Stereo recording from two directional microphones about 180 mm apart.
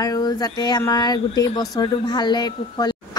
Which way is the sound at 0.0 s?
20° left (ahead or behind).